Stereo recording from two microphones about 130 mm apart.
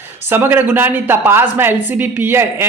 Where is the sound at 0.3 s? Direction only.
15° right (ahead or behind).